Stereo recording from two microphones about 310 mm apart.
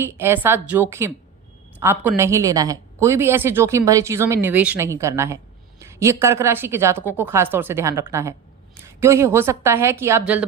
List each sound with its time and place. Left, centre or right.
0.0 s a woman's voice: centre